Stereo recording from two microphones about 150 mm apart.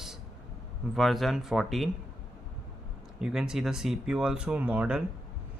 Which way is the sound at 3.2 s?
5° right (ahead or behind).